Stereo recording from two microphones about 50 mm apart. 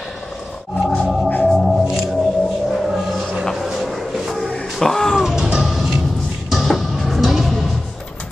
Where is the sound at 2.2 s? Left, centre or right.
Centre.